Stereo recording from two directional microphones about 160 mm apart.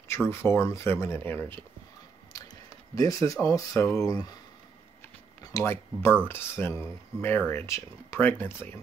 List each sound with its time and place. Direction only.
0.3 s speech: 15° left (ahead or behind)
5.4 s speech: 20° left (ahead or behind)